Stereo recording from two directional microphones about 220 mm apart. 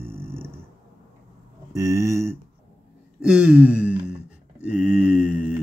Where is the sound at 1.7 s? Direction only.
15° right (ahead or behind).